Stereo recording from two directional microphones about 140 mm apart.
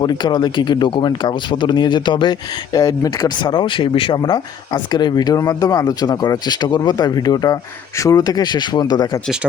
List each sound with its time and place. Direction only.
0.0 s speech: 30° left (ahead or behind)